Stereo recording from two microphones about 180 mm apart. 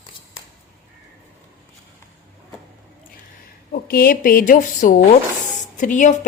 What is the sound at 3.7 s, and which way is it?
A woman's voice, 55° left (ahead or behind).